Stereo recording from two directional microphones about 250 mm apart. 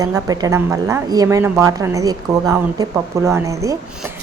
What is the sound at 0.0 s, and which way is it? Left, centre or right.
A woman's voice, centre.